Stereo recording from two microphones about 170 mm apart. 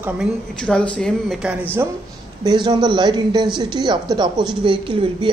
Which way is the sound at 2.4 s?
25° right (ahead or behind).